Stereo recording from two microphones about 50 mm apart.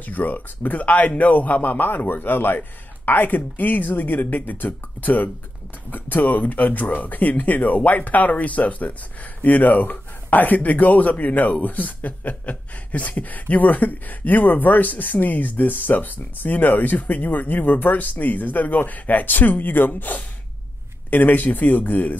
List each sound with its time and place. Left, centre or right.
0.0 s speech: left